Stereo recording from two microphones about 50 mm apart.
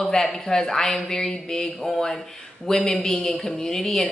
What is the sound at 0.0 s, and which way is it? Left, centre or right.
A man's voice, centre.